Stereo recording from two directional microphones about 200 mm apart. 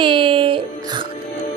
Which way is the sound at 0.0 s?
25° right (ahead or behind).